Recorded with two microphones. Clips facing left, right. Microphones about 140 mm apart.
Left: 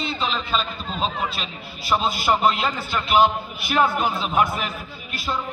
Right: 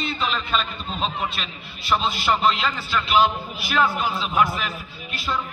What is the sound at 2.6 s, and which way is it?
A man's voice, 50° left (ahead or behind).